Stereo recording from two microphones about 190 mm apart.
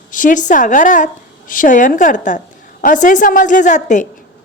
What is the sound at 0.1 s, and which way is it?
A woman's voice, 45° left (ahead or behind).